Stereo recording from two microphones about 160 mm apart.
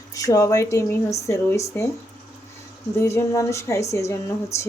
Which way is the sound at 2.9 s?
15° left (ahead or behind).